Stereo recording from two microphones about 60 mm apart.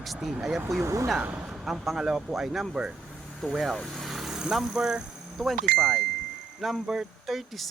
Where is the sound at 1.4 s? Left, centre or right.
Centre.